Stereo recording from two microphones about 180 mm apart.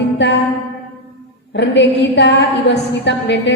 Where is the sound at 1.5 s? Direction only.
75° left (ahead or behind).